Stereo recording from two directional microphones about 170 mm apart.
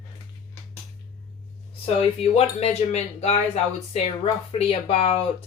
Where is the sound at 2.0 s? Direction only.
40° left (ahead or behind).